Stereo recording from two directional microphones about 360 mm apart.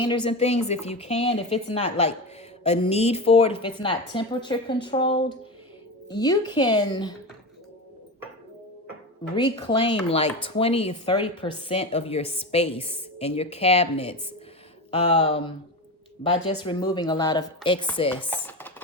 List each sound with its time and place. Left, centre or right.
0.0 s speech: centre
9.3 s speech: centre
16.6 s speech: centre